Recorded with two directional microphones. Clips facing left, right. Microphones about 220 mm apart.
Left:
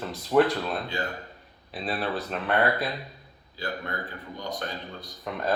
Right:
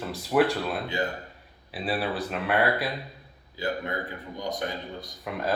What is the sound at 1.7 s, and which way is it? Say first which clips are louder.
A man's voice: right 1 dB; 10° right (ahead or behind).